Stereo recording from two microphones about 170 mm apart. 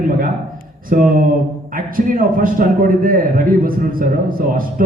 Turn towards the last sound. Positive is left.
turn(degrees=-55)  # may be behind; listen again after turning